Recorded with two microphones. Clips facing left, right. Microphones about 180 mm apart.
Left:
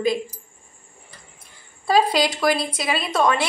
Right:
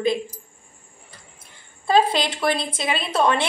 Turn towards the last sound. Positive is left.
turn(degrees=-30)  # may be behind; listen again after turning